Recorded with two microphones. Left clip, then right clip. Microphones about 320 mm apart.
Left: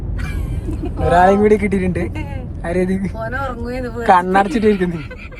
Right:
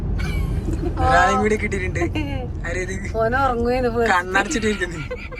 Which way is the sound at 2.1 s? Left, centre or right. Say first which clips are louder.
Right 3 dB; centre.